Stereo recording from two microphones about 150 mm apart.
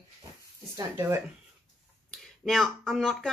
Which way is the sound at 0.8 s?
20° right (ahead or behind).